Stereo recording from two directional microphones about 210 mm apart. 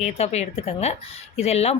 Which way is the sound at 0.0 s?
30° left (ahead or behind).